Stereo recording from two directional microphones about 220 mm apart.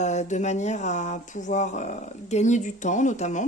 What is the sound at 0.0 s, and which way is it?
Speech, 30° left (ahead or behind).